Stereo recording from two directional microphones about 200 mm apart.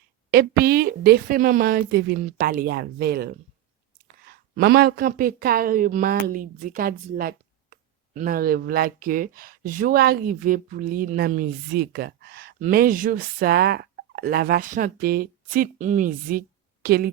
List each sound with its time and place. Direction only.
0.3 s a woman's voice: 50° right (ahead or behind)